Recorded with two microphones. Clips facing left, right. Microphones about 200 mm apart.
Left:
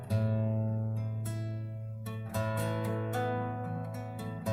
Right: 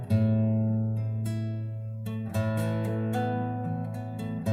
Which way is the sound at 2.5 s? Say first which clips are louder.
Right 3 dB; 30° right (ahead or behind).